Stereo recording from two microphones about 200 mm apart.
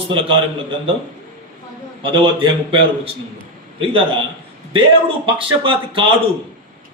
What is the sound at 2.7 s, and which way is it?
A man's voice, 30° right (ahead or behind).